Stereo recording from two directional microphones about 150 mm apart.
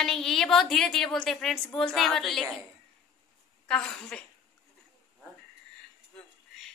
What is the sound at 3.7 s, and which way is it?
Speech, 5° left (ahead or behind).